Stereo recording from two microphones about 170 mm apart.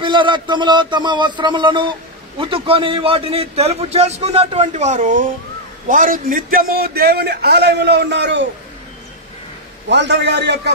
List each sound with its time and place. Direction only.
0.0 s a man's voice: 30° right (ahead or behind); by 8.5 s 90° right
9.8 s a man's voice: 90° right